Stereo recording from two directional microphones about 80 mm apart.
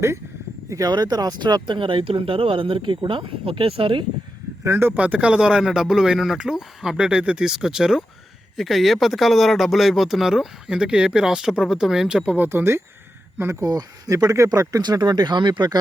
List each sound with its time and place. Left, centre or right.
0.9 s speech: right
4.6 s speech: right
4.9 s speech: centre
12.5 s speech: right
13.7 s speech: right
14.8 s speech: right